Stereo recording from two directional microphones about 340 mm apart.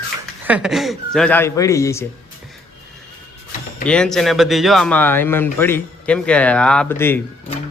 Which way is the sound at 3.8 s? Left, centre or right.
Centre.